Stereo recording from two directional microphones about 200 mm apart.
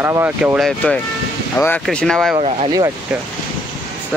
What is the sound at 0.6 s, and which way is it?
Speech, centre (ahead or behind).